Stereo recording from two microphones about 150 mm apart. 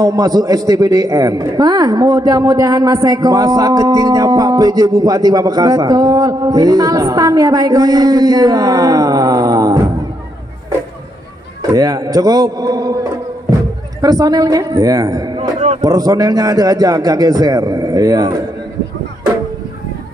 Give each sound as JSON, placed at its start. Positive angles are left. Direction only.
{"t": 0.0, "sound": "a man's voice", "side_deg": -25}
{"t": 11.7, "sound": "a man's voice", "side_deg": -25}
{"t": 14.0, "sound": "a man's voice", "side_deg": -25}